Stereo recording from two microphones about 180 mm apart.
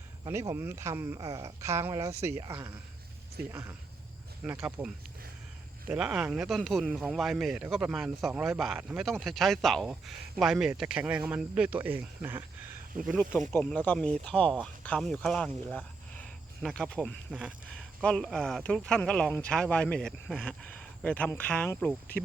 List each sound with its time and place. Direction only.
0.3 s speech: 15° right (ahead or behind)
5.9 s speech: 5° right (ahead or behind)